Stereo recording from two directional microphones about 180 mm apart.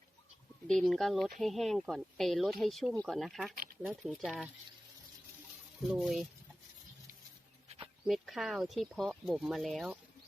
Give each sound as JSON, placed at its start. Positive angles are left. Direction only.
{"t": 0.8, "sound": "speech", "side_deg": 0}
{"t": 3.5, "sound": "speech", "side_deg": -50}
{"t": 3.8, "sound": "speech", "side_deg": 0}
{"t": 5.9, "sound": "speech", "side_deg": 0}
{"t": 8.0, "sound": "speech", "side_deg": 0}